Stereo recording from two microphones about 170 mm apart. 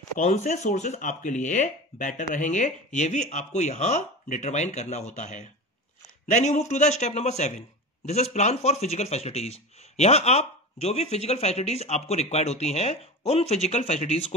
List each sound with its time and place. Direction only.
0.2 s a man's voice: 45° left (ahead or behind)